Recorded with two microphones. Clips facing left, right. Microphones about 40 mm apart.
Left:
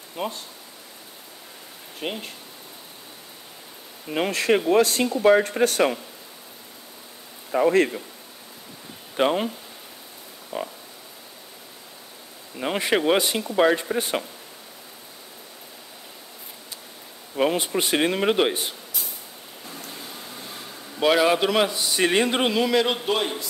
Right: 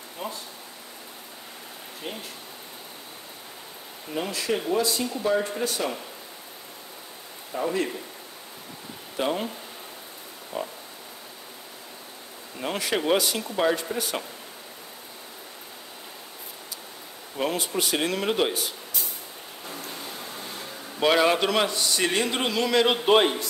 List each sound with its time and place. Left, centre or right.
0.2 s speech: left
2.0 s speech: left
4.1 s speech: left
7.5 s speech: left
9.2 s speech: left
10.5 s speech: left
12.7 s speech: left
17.4 s speech: left
21.0 s a man's voice: centre
23.0 s a man's voice: right